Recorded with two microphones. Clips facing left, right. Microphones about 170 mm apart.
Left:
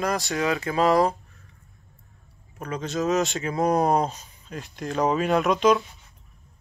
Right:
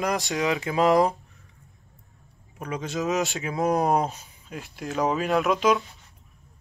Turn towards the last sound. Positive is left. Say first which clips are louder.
# left 2 dB
turn(degrees=0)  # may be behind; listen again after turning